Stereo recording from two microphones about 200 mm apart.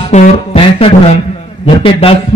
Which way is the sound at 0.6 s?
30° left (ahead or behind).